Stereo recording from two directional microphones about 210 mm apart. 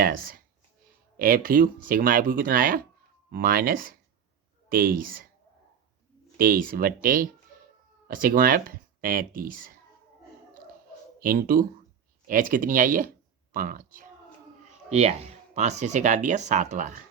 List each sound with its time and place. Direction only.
0.0 s speech: 40° right (ahead or behind)
6.3 s speech: 40° right (ahead or behind)
11.2 s speech: 40° right (ahead or behind)
14.8 s speech: 30° right (ahead or behind)